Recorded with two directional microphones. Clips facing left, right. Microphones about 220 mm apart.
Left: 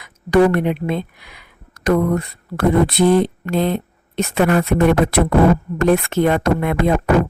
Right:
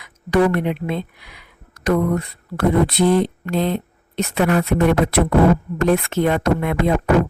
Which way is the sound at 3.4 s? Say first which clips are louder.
Left 2 dB; 50° left (ahead or behind).